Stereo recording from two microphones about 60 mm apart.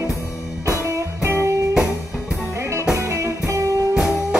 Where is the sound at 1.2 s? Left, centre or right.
Right.